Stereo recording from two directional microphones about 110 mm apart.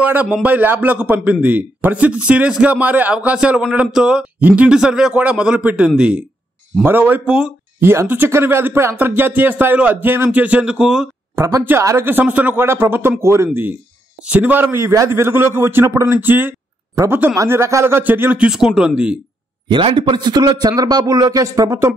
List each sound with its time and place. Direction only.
0.0 s a man's voice: 15° right (ahead or behind)
7.8 s a man's voice: 20° right (ahead or behind)
11.3 s a man's voice: 25° right (ahead or behind); by 19.1 s 10° right (ahead or behind)
19.7 s a man's voice: 50° right (ahead or behind); by 21.9 s 25° right (ahead or behind)